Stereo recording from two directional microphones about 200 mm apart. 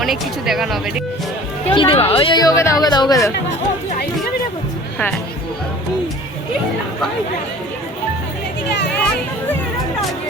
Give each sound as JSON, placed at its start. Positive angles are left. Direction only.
{"t": 0.0, "sound": "speech", "side_deg": 0}
{"t": 1.7, "sound": "a woman's voice", "side_deg": 25}